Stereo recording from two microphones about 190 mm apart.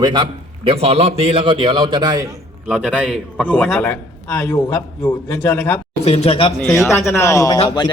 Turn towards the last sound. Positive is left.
turn(degrees=25)  # may be behind; listen again after turning